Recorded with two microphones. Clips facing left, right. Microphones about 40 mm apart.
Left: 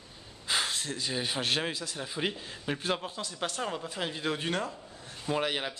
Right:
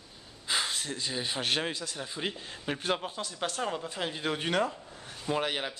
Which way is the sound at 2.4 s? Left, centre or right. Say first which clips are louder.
Even; centre.